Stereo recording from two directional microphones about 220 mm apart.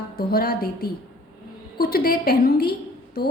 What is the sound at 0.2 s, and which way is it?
A woman's voice, 45° left (ahead or behind).